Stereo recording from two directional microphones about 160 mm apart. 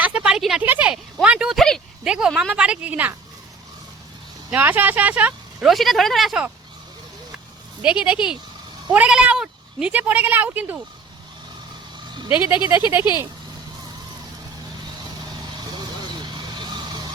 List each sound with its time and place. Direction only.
0.0 s speech: 10° right (ahead or behind)
4.5 s speech: 10° right (ahead or behind)
7.8 s speech: 5° right (ahead or behind)
12.3 s speech: 10° right (ahead or behind)
16.2 s vehicle: 30° right (ahead or behind)